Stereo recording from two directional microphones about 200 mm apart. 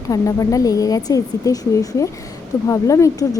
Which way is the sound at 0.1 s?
15° left (ahead or behind).